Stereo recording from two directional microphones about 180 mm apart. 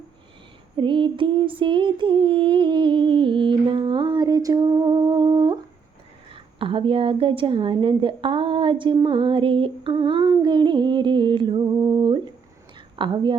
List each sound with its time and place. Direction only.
0.8 s a woman's voice: 30° right (ahead or behind)